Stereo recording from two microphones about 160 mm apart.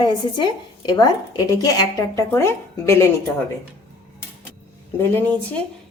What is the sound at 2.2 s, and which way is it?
Speech, 15° left (ahead or behind).